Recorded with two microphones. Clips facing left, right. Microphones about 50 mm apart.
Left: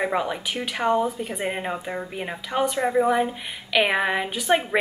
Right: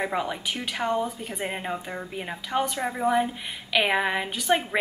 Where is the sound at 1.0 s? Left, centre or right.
Centre.